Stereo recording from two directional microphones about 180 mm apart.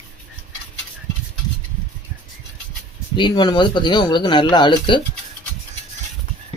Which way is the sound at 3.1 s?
25° left (ahead or behind).